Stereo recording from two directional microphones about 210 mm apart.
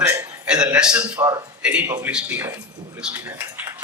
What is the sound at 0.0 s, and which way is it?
A man's voice, 10° right (ahead or behind).